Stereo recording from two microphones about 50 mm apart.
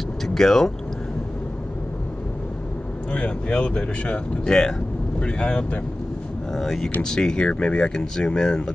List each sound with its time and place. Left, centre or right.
0.3 s speech: centre
3.1 s speech: left
4.5 s speech: centre
6.5 s speech: centre